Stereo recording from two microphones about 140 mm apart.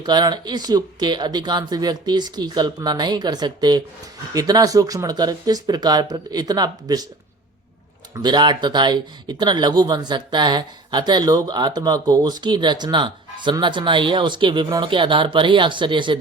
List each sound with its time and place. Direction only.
0.0 s speech: 30° right (ahead or behind)
8.1 s speech: 30° right (ahead or behind)